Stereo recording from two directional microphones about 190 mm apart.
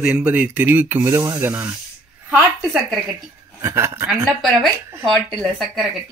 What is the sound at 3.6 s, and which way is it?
Speech, 15° right (ahead or behind).